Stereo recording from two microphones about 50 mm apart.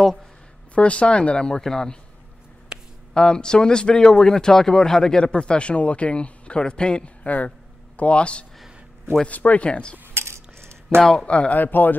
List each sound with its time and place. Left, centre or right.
0.7 s speech: left
2.7 s a sound: centre
3.2 s speech: centre
7.2 s speech: left
8.0 s speech: left
9.7 s speech: centre
10.1 s cutlery: right
11.0 s speech: centre
11.2 s speech: left
11.5 s speech: left